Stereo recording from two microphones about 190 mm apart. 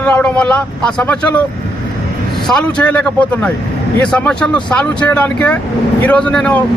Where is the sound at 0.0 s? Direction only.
5° left (ahead or behind).